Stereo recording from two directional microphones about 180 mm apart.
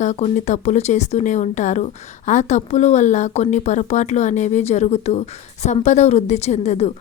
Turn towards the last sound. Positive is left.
turn(degrees=40)  # may be behind; listen again after turning